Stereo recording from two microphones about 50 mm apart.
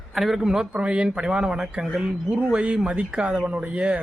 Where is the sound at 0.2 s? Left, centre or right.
Centre.